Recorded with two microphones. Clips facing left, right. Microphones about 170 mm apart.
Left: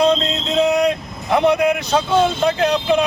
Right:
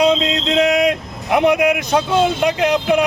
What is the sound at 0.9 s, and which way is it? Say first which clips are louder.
A man's voice: right 1 dB; 10° right (ahead or behind).